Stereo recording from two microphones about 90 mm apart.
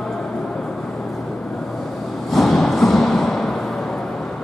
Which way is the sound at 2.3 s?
5° left (ahead or behind).